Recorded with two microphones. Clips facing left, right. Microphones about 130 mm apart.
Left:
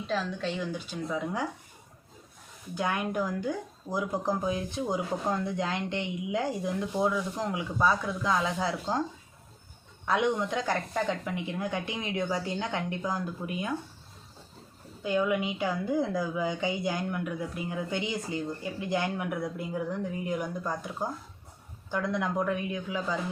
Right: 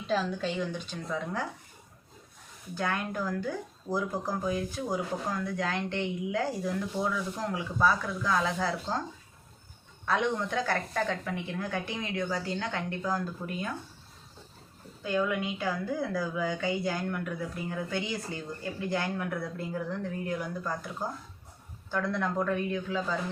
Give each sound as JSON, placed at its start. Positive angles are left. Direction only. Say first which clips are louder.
{"t": 0.1, "sound": "speech", "louder": "right 2 dB", "side_deg": 0}
{"t": 2.7, "sound": "speech", "louder": "left 2 dB", "side_deg": 15}
{"t": 10.1, "sound": "speech", "louder": "left 2 dB", "side_deg": 15}
{"t": 15.0, "sound": "speech", "louder": "left 2 dB", "side_deg": 15}